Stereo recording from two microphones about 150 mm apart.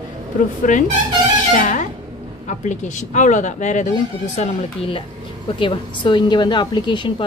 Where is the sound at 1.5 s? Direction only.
55° left (ahead or behind).